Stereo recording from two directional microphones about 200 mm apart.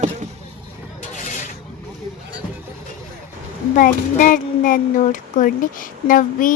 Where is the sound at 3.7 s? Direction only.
40° left (ahead or behind).